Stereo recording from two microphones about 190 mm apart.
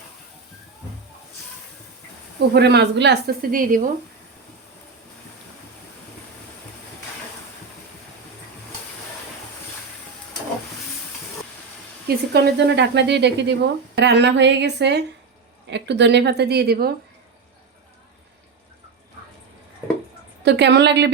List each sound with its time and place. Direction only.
2.6 s speech: 60° right (ahead or behind)
12.0 s speech: 55° right (ahead or behind)
20.4 s speech: 65° right (ahead or behind)